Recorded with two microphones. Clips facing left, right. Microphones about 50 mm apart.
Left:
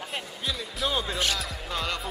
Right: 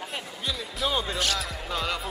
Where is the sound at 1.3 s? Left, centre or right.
Centre.